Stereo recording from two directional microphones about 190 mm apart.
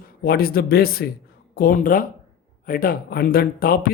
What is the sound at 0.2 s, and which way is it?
Speech, 50° left (ahead or behind).